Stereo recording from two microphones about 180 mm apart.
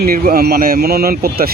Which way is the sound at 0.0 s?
55° right (ahead or behind).